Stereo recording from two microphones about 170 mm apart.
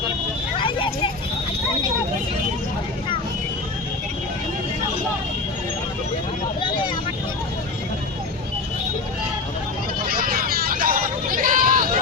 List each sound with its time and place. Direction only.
0.6 s vehicle: 30° left (ahead or behind)
10.1 s hubbub: 60° right (ahead or behind)